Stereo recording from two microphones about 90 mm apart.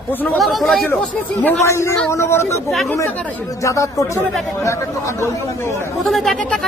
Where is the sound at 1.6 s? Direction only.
30° left (ahead or behind).